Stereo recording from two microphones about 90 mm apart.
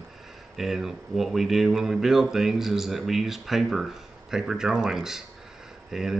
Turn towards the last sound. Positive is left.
turn(degrees=-5)  # may be behind; listen again after turning